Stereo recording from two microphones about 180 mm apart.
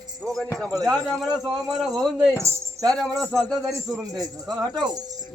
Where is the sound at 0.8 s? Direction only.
5° left (ahead or behind).